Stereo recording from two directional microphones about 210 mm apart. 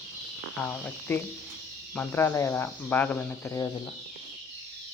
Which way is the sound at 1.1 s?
10° left (ahead or behind).